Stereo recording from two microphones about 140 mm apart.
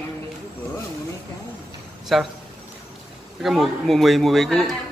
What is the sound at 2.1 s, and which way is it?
Speech, centre (ahead or behind).